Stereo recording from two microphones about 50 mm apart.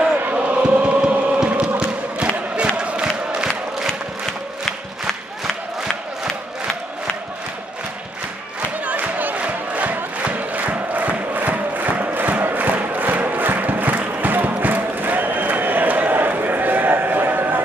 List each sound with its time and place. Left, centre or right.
0.3 s chant: right
2.8 s crowd: centre
8.8 s crowd: right